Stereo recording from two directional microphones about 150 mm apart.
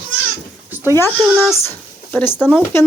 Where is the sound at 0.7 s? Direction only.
15° right (ahead or behind).